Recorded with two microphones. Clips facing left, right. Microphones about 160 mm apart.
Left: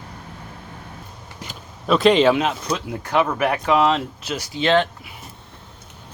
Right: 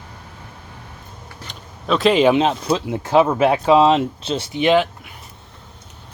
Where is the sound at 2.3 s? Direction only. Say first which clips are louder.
Right 5 dB; 25° right (ahead or behind).